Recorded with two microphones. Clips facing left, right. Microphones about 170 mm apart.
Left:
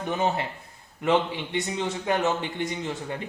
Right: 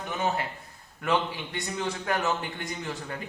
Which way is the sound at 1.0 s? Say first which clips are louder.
Left 4 dB; 20° left (ahead or behind).